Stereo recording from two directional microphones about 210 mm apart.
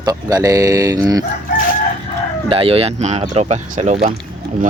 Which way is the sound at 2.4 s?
25° right (ahead or behind).